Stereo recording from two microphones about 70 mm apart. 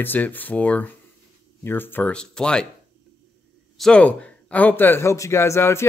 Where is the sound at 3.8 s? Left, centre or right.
Centre; by 5.1 s left.